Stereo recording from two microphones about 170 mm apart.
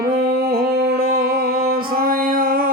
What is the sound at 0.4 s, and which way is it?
Music, 60° right (ahead or behind).